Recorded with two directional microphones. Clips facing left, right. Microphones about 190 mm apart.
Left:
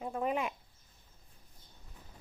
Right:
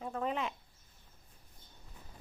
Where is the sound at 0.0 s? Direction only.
15° left (ahead or behind).